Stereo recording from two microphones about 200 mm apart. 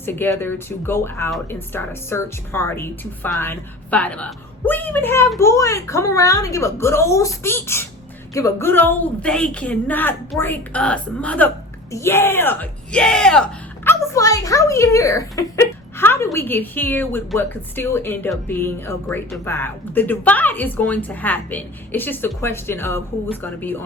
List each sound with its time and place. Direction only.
0.0 s speech: 10° left (ahead or behind)
13.8 s speech: 15° left (ahead or behind)